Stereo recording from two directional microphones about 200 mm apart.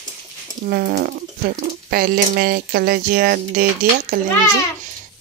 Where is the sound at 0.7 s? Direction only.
50° right (ahead or behind).